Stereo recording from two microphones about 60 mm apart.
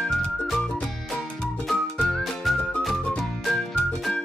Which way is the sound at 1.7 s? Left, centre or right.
Centre.